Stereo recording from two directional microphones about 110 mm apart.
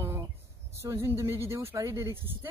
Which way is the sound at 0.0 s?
25° right (ahead or behind).